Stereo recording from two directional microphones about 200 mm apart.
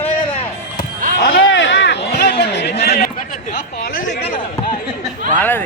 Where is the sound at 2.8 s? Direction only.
50° left (ahead or behind).